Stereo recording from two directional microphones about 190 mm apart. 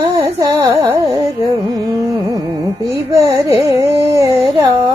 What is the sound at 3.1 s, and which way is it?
Carnatic music, 15° right (ahead or behind).